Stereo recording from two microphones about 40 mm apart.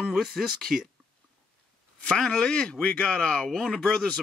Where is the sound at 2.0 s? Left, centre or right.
Left.